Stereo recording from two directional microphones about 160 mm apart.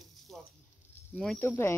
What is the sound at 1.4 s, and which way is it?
Speech, 15° left (ahead or behind).